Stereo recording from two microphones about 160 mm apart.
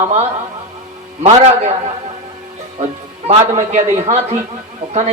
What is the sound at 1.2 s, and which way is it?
Speech, 45° right (ahead or behind).